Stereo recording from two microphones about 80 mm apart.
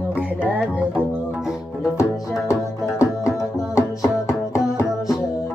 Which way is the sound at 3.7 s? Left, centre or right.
Left.